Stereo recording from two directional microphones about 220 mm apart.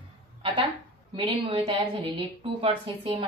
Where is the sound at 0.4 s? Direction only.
20° right (ahead or behind).